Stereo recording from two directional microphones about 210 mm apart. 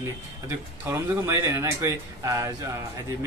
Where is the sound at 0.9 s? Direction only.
15° right (ahead or behind).